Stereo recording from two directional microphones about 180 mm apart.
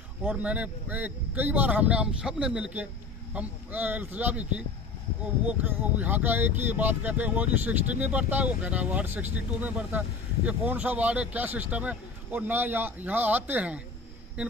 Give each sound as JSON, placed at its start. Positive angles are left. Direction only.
{"t": 0.2, "sound": "speech", "side_deg": -10}